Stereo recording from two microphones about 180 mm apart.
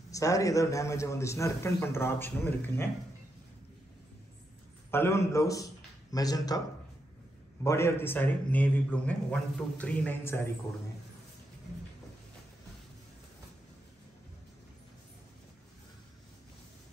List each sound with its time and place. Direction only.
0.1 s a man's voice: 20° left (ahead or behind)
4.9 s a man's voice: 15° left (ahead or behind)
7.6 s a man's voice: 15° left (ahead or behind)